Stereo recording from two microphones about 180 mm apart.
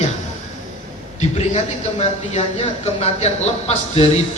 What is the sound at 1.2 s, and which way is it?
A man's voice, 40° left (ahead or behind).